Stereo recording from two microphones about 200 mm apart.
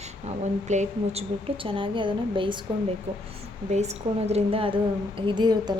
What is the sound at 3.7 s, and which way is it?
A woman's voice, 35° right (ahead or behind).